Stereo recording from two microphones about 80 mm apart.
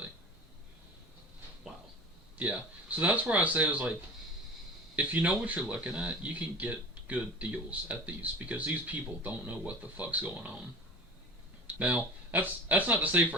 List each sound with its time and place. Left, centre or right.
2.4 s speech: centre
4.9 s speech: centre
11.7 s speech: centre